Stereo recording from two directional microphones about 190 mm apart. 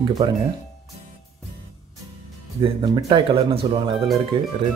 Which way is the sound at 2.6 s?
20° right (ahead or behind).